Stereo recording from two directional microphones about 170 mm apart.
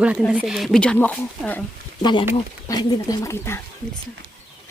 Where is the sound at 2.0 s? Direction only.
25° left (ahead or behind).